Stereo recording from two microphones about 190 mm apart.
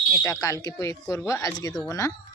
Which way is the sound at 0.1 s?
15° left (ahead or behind).